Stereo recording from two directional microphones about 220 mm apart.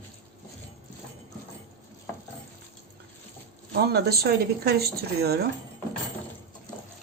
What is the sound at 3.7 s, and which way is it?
Speech, 45° right (ahead or behind).